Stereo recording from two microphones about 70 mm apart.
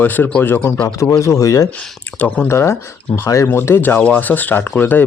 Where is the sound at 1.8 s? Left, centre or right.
Centre.